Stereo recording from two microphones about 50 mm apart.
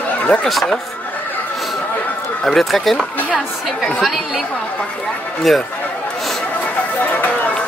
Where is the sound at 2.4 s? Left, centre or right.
Centre.